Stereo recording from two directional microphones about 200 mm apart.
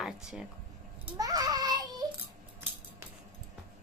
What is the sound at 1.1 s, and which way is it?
Child singing, 20° right (ahead or behind).